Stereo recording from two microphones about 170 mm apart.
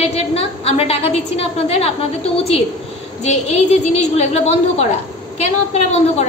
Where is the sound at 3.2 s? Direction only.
40° left (ahead or behind).